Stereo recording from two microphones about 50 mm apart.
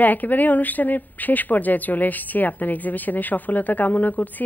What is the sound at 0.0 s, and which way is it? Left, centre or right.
A woman's voice, left.